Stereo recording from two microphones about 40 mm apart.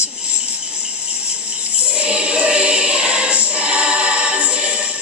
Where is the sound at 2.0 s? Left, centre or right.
Right.